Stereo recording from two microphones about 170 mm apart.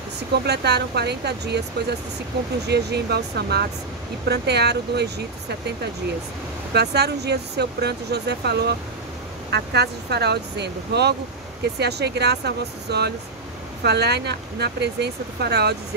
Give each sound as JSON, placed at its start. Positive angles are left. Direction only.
{"t": 0.3, "sound": "speech", "side_deg": -75}
{"t": 2.7, "sound": "speech", "side_deg": -75}
{"t": 6.7, "sound": "speech", "side_deg": -75}